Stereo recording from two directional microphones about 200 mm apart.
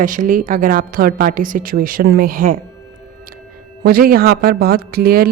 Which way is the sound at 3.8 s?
50° right (ahead or behind).